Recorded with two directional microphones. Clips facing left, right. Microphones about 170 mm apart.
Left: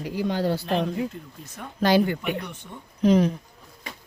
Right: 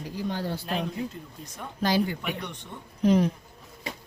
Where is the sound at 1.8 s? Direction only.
65° left (ahead or behind).